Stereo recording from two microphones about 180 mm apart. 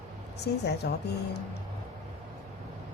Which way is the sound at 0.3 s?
65° left (ahead or behind).